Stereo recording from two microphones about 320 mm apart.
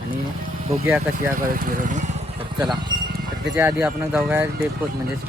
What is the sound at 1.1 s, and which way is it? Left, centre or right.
Speech, right.